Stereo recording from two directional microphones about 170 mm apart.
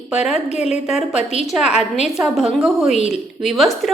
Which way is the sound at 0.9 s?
5° right (ahead or behind).